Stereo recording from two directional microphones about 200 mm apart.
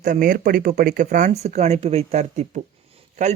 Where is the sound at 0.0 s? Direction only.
45° right (ahead or behind).